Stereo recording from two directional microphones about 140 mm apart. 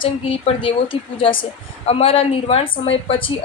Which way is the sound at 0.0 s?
40° left (ahead or behind).